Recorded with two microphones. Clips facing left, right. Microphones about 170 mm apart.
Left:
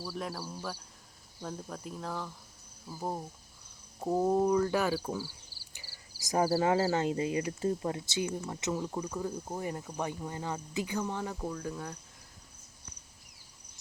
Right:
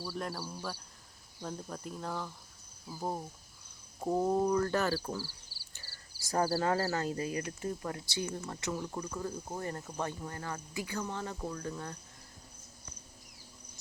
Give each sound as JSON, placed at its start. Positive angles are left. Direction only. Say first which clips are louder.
{"t": 0.0, "sound": "speech", "louder": "even", "side_deg": 0}